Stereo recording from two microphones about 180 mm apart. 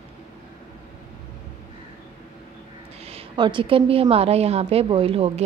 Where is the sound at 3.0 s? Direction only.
35° right (ahead or behind).